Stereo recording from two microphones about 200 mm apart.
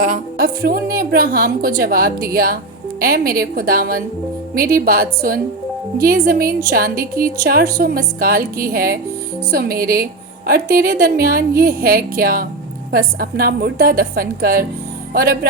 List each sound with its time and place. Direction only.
0.0 s a woman's voice: 45° right (ahead or behind)